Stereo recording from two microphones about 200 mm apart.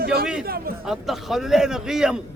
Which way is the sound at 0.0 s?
50° right (ahead or behind).